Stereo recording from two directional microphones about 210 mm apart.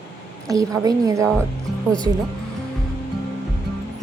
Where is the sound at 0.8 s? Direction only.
15° right (ahead or behind).